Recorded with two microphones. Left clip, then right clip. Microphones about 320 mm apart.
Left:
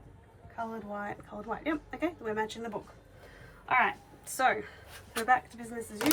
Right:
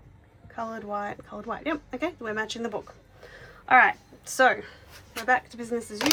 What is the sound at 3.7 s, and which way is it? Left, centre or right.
A woman's voice, centre.